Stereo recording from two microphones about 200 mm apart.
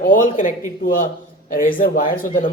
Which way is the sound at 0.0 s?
40° left (ahead or behind).